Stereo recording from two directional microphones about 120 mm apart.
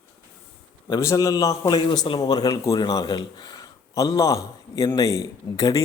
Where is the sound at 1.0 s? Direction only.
25° left (ahead or behind).